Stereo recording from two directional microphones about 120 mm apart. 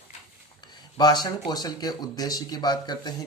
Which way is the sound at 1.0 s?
35° left (ahead or behind).